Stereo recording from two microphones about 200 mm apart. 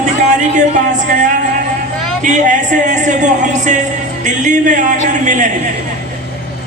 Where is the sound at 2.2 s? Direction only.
40° right (ahead or behind).